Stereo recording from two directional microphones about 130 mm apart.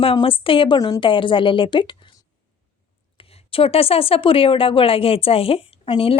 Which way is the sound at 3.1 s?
50° left (ahead or behind).